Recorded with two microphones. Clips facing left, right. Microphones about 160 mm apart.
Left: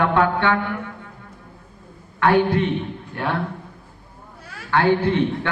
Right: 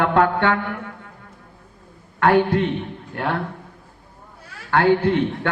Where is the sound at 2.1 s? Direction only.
50° right (ahead or behind).